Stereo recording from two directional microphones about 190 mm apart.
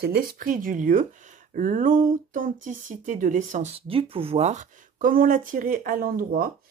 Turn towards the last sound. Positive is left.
turn(degrees=-50)  # may be behind; listen again after turning